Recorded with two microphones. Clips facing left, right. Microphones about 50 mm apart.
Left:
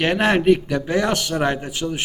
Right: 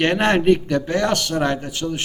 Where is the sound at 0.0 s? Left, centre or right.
Centre.